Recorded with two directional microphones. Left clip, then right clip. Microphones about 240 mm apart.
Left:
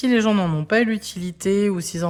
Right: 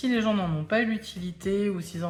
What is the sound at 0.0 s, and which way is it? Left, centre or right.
Speech, left.